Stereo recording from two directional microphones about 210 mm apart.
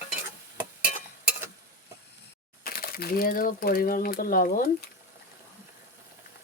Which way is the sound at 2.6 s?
45° left (ahead or behind).